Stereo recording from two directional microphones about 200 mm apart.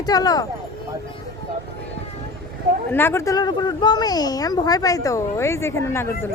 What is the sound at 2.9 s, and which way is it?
Speech, 10° left (ahead or behind).